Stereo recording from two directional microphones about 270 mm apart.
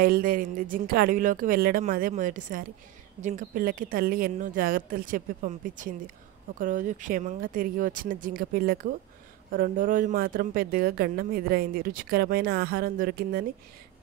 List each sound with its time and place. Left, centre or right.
0.0 s a woman's voice: right